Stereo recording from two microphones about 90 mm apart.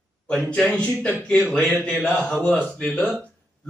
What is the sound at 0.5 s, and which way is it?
A man's voice, 10° left (ahead or behind).